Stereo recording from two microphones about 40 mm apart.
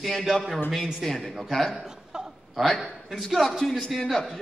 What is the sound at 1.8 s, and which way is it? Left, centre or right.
Chuckle, centre.